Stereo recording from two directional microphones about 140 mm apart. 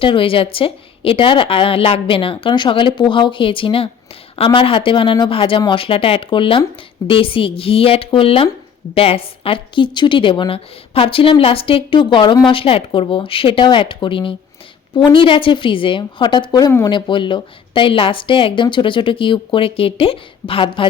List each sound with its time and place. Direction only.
0.0 s speech: 40° left (ahead or behind)